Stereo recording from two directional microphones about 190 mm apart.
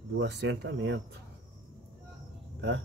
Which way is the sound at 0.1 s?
65° right (ahead or behind).